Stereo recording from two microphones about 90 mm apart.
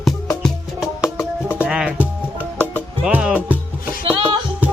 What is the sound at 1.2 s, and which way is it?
Music, 25° left (ahead or behind).